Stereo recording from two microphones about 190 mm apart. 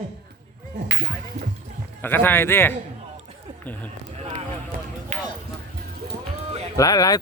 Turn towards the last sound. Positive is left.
turn(degrees=20)  # may be behind; listen again after turning